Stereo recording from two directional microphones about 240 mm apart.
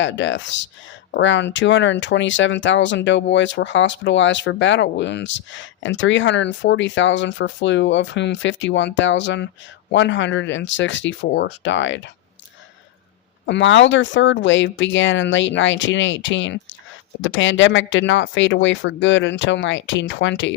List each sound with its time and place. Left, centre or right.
0.0 s speech: left
13.4 s speech: left